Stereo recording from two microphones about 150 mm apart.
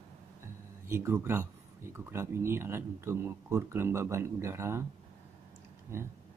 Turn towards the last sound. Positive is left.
turn(degrees=-20)  # may be behind; listen again after turning